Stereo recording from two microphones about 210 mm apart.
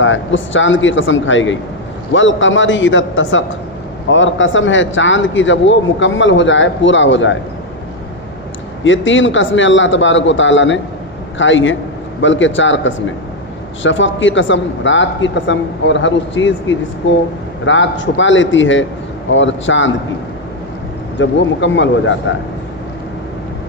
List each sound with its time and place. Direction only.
0.0 s a man's voice: 65° left (ahead or behind)
8.8 s a man's voice: 65° left (ahead or behind)
21.2 s a man's voice: 60° left (ahead or behind)